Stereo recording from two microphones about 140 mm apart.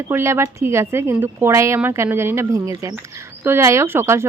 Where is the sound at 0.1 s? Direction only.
20° right (ahead or behind).